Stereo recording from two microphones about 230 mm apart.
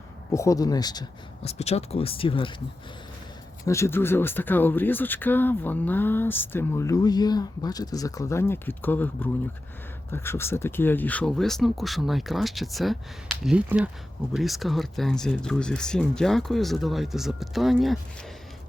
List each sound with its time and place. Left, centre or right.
0.3 s speech: centre
3.7 s speech: centre